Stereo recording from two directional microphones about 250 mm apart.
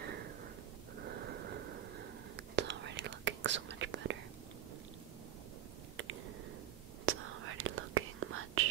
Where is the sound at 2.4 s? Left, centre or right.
Right.